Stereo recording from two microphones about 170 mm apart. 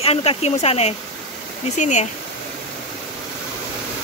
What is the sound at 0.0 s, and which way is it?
Speech, 35° left (ahead or behind).